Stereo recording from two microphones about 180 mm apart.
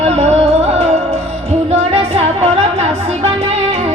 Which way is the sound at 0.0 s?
35° right (ahead or behind).